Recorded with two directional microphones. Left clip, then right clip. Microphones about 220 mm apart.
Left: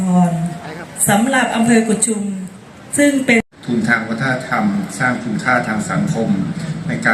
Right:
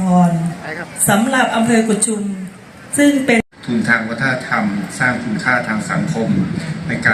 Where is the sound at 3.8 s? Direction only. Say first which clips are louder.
Right 1 dB; 50° left (ahead or behind).